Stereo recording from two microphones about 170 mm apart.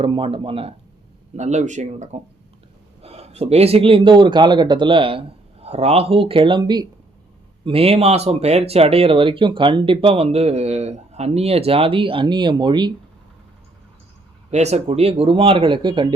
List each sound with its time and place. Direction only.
0.0 s speech: 30° right (ahead or behind)
1.4 s speech: 45° right (ahead or behind); by 12.9 s 25° right (ahead or behind)
14.5 s speech: 40° right (ahead or behind)